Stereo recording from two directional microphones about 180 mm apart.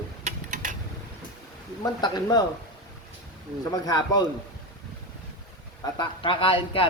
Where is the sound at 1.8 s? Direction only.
20° left (ahead or behind).